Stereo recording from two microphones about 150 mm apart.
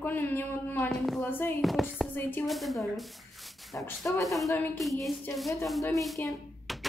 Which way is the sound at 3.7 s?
20° left (ahead or behind).